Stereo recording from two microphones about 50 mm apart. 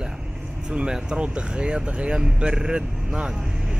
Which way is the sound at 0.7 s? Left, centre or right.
Centre.